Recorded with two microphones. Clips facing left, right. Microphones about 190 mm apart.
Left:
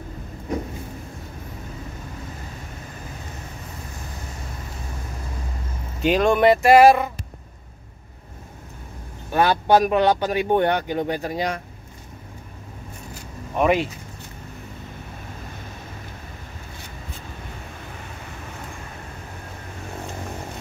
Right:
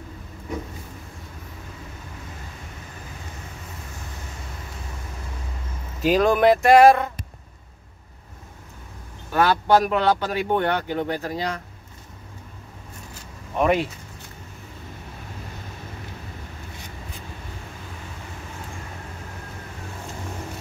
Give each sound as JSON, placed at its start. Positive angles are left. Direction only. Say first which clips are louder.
{"t": 5.9, "sound": "speech", "louder": "even", "side_deg": 0}
{"t": 9.3, "sound": "speech", "louder": "left 1 dB", "side_deg": 15}
{"t": 13.6, "sound": "speech", "louder": "left 1 dB", "side_deg": 5}